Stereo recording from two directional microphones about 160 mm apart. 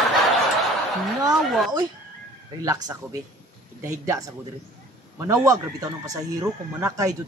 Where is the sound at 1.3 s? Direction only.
Centre (ahead or behind).